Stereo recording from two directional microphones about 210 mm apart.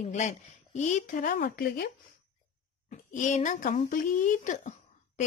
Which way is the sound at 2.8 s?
35° left (ahead or behind).